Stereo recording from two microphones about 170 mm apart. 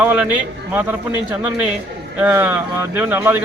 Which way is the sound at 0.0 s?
10° right (ahead or behind).